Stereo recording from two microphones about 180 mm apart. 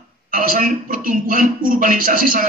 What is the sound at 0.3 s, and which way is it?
Speech, 50° right (ahead or behind).